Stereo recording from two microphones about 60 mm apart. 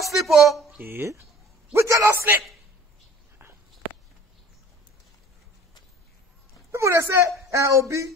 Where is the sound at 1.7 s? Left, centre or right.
Right.